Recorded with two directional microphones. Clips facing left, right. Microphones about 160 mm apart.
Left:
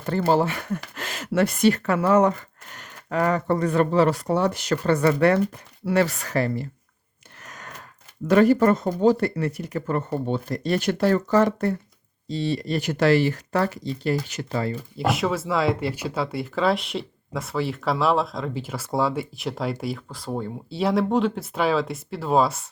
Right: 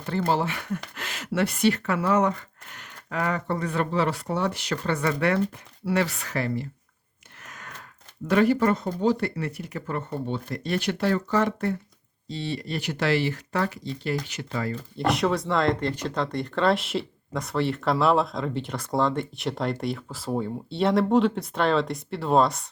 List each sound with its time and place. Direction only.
0.3 s speech: 45° left (ahead or behind)
7.4 s a sound: 40° left (ahead or behind)
8.3 s speech: 45° left (ahead or behind)
14.8 s speech: 5° left (ahead or behind)